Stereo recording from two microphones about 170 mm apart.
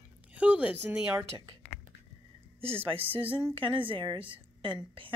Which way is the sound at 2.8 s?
35° right (ahead or behind).